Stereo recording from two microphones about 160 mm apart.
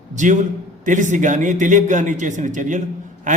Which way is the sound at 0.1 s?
50° right (ahead or behind).